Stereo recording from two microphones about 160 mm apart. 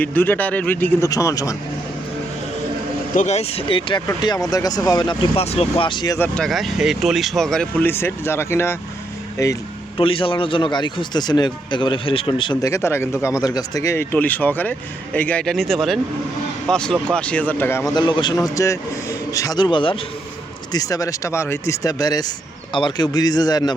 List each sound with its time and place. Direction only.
0.0 s speech: 10° left (ahead or behind)
3.2 s speech: 45° left (ahead or behind); by 6.1 s 30° left (ahead or behind)
6.1 s speech: 10° left (ahead or behind)
10.0 s speech: 35° left (ahead or behind)
12.7 s speech: 15° left (ahead or behind)
17.9 s speech: 30° left (ahead or behind)